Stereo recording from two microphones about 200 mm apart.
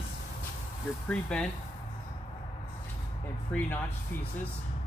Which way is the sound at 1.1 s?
5° left (ahead or behind).